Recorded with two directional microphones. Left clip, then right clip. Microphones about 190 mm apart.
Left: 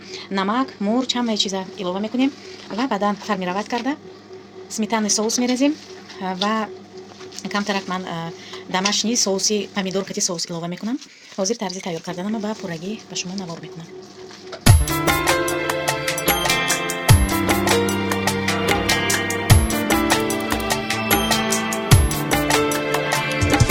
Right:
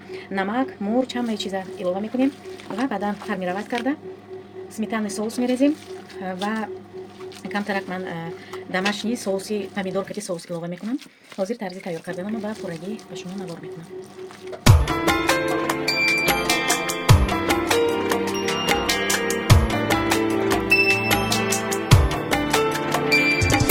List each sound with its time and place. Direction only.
0.3 s speech: 25° left (ahead or behind)
14.6 s music: centre (ahead or behind)